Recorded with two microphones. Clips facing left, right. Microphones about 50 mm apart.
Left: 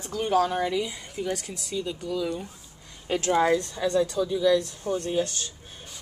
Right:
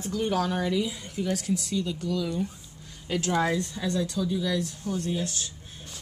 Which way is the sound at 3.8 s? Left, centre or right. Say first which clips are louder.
Left 4 dB; left.